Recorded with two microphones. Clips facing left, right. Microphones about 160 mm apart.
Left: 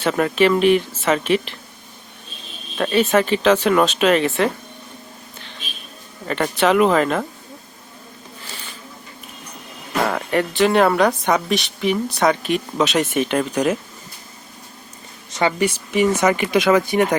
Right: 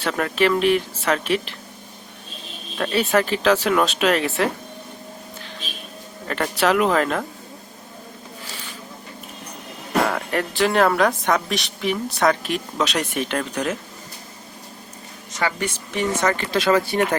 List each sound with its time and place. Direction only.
0.0 s speech: 5° left (ahead or behind)
2.7 s speech: centre (ahead or behind)
6.2 s speech: centre (ahead or behind)
10.1 s speech: centre (ahead or behind)
15.4 s speech: 20° left (ahead or behind)
15.6 s speech: 10° left (ahead or behind)